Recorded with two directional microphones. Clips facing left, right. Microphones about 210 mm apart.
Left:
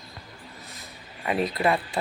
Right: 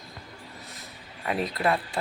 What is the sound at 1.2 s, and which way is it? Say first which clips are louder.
Speech: left 2 dB; 5° left (ahead or behind).